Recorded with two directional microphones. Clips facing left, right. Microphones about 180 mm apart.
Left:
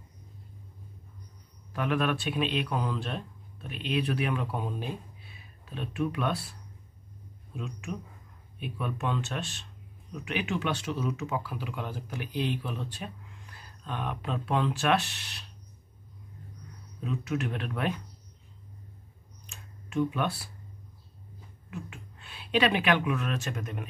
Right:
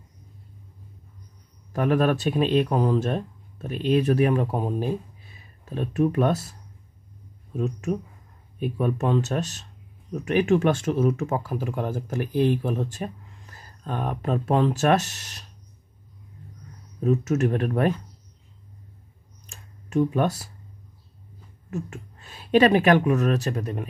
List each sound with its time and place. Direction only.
1.7 s speech: 40° right (ahead or behind)
17.0 s speech: 45° right (ahead or behind)
19.4 s a sound: 40° right (ahead or behind)
21.6 s speech: 45° right (ahead or behind)